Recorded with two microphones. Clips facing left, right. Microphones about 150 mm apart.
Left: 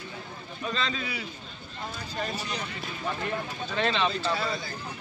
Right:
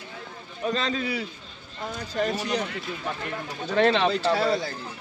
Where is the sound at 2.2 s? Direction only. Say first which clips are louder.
Right 9 dB; 90° right.